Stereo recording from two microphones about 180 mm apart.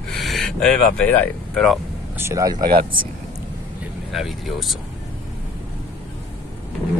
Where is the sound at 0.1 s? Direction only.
Centre (ahead or behind).